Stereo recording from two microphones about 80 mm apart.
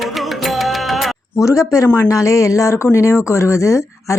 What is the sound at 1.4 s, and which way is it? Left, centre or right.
A man's voice, left.